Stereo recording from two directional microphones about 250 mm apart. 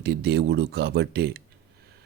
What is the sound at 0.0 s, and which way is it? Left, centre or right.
A man's voice, right.